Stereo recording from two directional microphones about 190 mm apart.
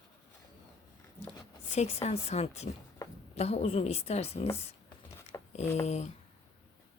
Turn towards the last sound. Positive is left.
turn(degrees=35)  # may be behind; listen again after turning